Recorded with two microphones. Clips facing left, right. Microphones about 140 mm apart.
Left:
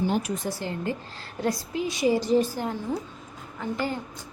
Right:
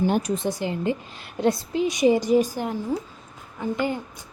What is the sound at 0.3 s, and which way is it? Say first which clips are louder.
A woman's voice: right 4 dB; 20° right (ahead or behind).